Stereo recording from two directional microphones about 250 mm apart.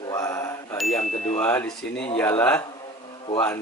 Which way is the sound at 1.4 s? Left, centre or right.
Centre.